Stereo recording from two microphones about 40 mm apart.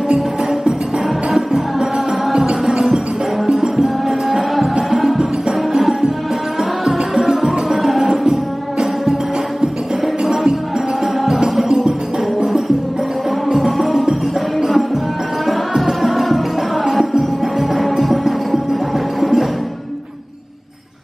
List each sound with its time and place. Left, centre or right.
1.3 s music: centre
2.3 s music: centre
3.4 s music: centre
10.2 s music: centre
13.6 s music: centre
15.8 s music: centre